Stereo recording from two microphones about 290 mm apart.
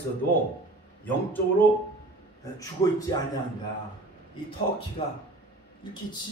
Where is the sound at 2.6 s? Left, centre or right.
Centre.